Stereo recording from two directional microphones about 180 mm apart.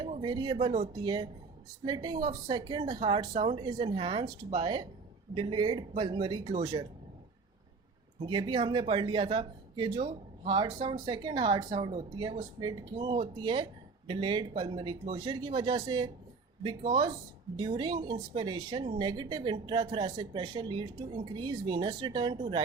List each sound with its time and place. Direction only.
0.1 s speech: 25° right (ahead or behind)
0.7 s speech: 35° right (ahead or behind)
1.0 s speech: 25° right (ahead or behind)
8.2 s speech: 25° right (ahead or behind)